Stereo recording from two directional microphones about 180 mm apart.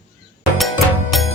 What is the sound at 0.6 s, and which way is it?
Music, centre (ahead or behind).